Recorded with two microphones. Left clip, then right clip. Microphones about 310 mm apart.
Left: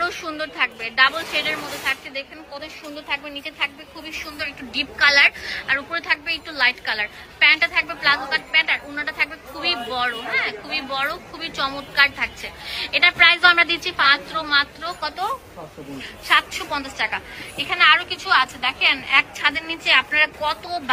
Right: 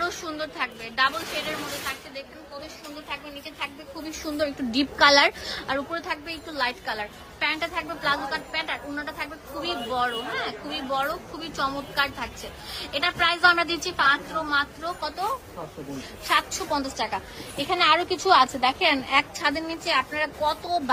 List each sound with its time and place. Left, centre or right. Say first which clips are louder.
0.0 s a woman's voice: left 4 dB; centre
3.1 s a woman's voice: left 9 dB; centre
4.1 s a woman's voice: right 1 dB; centre
5.7 s a woman's voice: left 7 dB; centre